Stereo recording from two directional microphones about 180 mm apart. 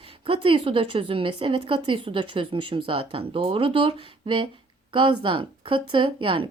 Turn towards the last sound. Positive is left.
turn(degrees=-30)  # may be behind; listen again after turning